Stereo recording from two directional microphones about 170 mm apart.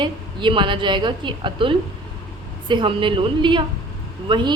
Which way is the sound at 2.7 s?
30° right (ahead or behind).